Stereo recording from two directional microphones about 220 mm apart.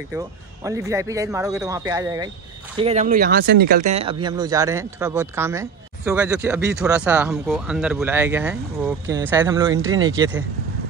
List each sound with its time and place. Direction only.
0.7 s speech: 15° right (ahead or behind)
2.8 s speech: 30° right (ahead or behind)
3.8 s speech: 25° right (ahead or behind)